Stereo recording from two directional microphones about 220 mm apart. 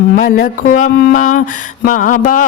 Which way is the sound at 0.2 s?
35° left (ahead or behind).